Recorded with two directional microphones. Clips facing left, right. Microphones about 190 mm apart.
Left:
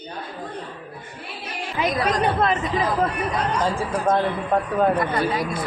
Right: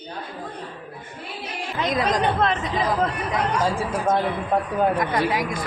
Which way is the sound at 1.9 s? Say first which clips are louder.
Right 1 dB; 20° right (ahead or behind).